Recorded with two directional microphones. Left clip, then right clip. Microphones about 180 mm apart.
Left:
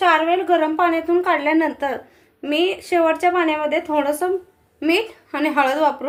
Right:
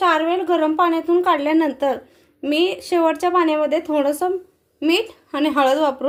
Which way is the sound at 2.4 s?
75° right (ahead or behind).